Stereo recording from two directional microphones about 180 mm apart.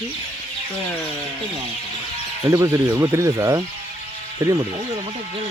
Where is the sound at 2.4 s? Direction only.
15° right (ahead or behind).